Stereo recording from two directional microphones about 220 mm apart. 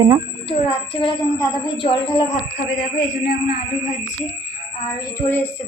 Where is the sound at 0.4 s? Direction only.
25° left (ahead or behind).